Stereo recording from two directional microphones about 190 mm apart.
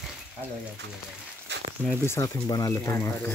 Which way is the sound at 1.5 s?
65° right (ahead or behind).